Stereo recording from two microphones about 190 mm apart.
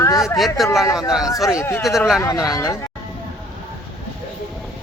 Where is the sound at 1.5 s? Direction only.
15° left (ahead or behind).